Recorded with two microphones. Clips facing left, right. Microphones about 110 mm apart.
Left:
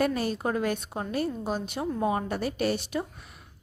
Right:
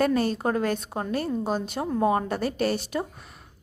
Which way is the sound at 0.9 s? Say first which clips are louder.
Right 3 dB; 30° right (ahead or behind).